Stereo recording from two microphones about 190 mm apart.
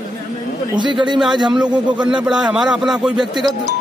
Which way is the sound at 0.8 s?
25° right (ahead or behind).